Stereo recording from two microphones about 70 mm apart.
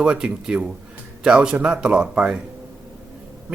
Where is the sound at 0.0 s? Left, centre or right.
Centre.